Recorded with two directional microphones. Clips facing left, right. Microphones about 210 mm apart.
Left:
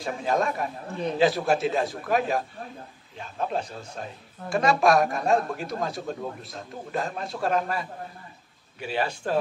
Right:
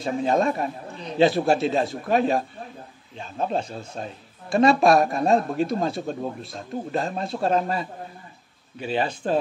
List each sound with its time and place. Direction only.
0.0 s a man's voice: 25° right (ahead or behind)